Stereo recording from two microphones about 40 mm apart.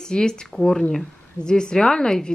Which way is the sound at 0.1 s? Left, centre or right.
Left.